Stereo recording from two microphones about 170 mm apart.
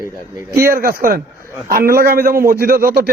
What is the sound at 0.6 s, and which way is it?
A man's voice, 60° right (ahead or behind).